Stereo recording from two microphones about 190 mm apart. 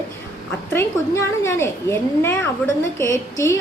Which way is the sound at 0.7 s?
15° left (ahead or behind).